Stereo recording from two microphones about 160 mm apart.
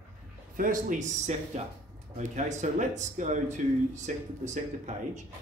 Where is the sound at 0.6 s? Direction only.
55° right (ahead or behind).